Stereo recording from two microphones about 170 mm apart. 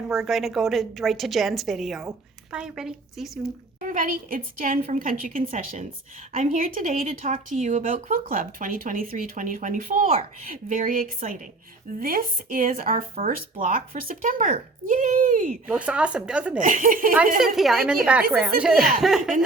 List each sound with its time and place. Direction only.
0.1 s a woman's voice: centre (ahead or behind)
3.8 s speech: 50° right (ahead or behind)
15.6 s a woman's voice: 5° right (ahead or behind)
16.6 s speech: 50° right (ahead or behind)
17.4 s a woman's voice: centre (ahead or behind)